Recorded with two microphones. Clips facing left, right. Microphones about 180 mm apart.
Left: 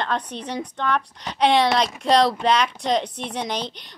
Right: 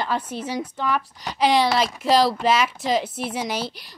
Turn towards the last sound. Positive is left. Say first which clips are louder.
# even
turn(degrees=-5)  # may be behind; listen again after turning